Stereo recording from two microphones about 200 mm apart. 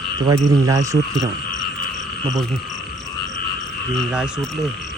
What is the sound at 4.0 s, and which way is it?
Speech, 5° right (ahead or behind).